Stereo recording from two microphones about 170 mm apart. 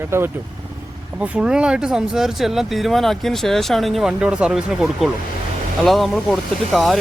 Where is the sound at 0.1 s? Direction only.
15° right (ahead or behind).